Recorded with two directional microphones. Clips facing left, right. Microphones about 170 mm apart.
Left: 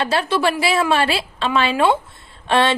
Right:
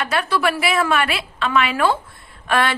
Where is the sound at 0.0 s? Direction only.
30° left (ahead or behind).